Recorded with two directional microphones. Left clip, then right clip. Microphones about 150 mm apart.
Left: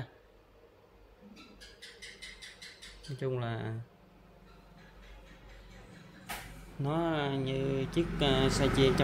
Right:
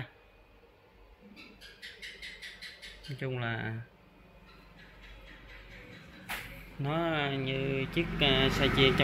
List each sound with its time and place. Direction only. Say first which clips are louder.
3.2 s speech: even; 15° left (ahead or behind)
6.8 s speech: right 1 dB; 20° left (ahead or behind)